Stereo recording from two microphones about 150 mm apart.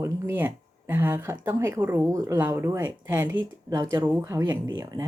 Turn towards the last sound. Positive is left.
turn(degrees=-20)  # may be behind; listen again after turning